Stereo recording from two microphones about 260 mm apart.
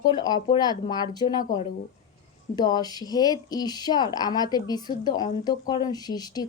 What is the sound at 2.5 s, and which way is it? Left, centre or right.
A woman's voice, centre.